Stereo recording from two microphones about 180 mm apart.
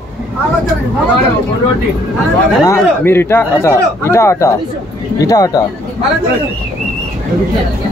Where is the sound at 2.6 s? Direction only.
15° left (ahead or behind).